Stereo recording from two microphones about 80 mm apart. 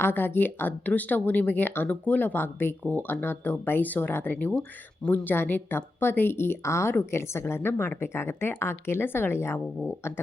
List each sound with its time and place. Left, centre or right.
0.0 s speech: left